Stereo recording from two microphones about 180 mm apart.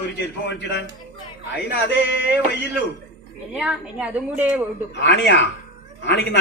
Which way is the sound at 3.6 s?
5° right (ahead or behind).